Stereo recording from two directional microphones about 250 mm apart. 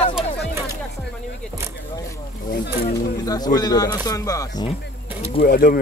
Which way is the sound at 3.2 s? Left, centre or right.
Centre.